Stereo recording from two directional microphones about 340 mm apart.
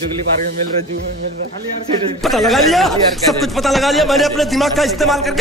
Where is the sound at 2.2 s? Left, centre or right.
Centre.